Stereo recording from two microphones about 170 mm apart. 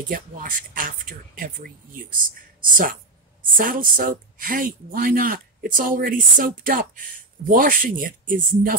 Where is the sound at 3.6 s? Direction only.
55° right (ahead or behind).